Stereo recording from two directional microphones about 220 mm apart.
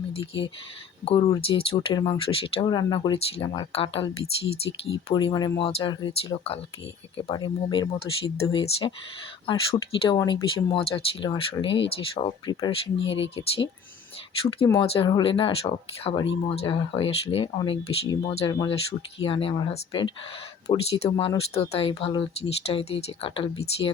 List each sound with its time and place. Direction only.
1.0 s speech: 20° left (ahead or behind)
14.8 s speech: 25° left (ahead or behind)